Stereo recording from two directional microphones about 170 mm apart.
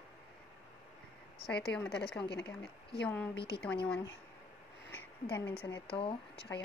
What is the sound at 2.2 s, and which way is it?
Speech, 80° left.